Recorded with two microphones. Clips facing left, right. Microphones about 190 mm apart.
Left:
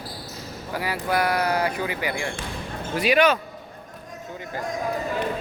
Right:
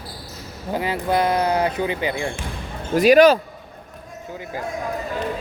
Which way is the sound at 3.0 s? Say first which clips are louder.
Right 8 dB; 40° right (ahead or behind).